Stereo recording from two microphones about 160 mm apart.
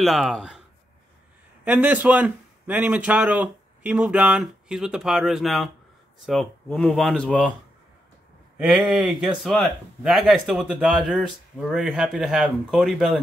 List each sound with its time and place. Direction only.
0.0 s speech: centre (ahead or behind)
1.6 s speech: 10° right (ahead or behind)
8.5 s speech: 5° right (ahead or behind)